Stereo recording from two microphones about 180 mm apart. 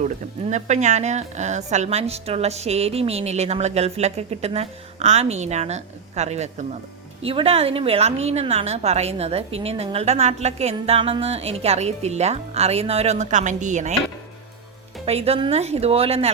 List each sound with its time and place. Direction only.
0.0 s a woman's voice: 40° right (ahead or behind)
15.0 s a woman's voice: 35° right (ahead or behind)